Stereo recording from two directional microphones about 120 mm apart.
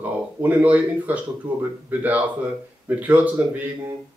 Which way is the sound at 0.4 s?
15° right (ahead or behind).